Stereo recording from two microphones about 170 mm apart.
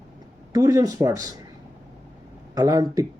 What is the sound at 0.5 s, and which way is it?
Speech, 20° right (ahead or behind).